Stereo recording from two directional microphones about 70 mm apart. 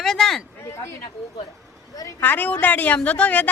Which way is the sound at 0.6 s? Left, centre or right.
Left.